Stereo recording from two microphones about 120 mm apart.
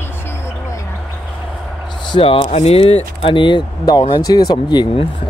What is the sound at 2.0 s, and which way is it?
Speech, 45° left (ahead or behind).